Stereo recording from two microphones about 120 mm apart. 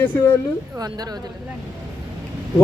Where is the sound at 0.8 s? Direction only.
35° right (ahead or behind).